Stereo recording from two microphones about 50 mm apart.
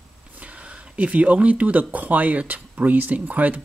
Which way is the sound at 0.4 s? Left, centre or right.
Right.